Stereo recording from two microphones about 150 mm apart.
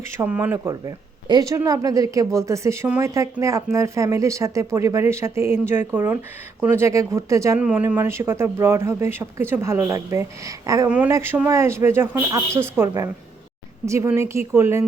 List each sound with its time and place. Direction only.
0.2 s speech: 10° right (ahead or behind)
10.8 s speech: 10° right (ahead or behind)
13.8 s speech: 20° right (ahead or behind)